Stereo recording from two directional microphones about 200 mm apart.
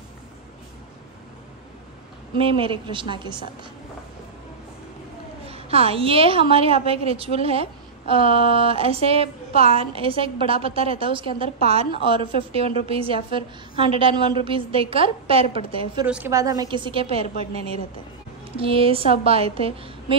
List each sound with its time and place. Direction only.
2.3 s a woman's voice: 25° right (ahead or behind)
5.5 s a woman's voice: 30° right (ahead or behind)
16.1 s a woman's voice: 10° right (ahead or behind); by 17.3 s 30° right (ahead or behind)
18.6 s a woman's voice: 30° right (ahead or behind)